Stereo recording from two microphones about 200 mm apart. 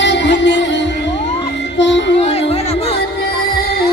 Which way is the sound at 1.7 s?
65° left (ahead or behind).